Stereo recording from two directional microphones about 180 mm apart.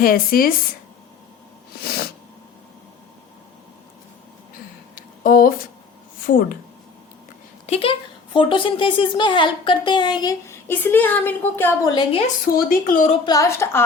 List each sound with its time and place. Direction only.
0.0 s speech: 55° left (ahead or behind)
4.9 s a sound: 50° left (ahead or behind)
6.2 s speech: 50° left (ahead or behind)
7.7 s a woman's voice: 30° left (ahead or behind)
12.5 s speech: 55° left (ahead or behind)
13.2 s a woman's voice: 20° left (ahead or behind)